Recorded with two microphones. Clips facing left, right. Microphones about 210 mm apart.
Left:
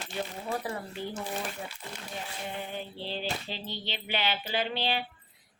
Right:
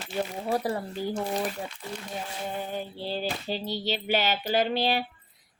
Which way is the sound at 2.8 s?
40° right (ahead or behind).